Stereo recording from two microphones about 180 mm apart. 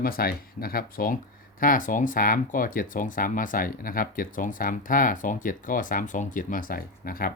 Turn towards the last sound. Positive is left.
turn(degrees=55)  # may be behind; listen again after turning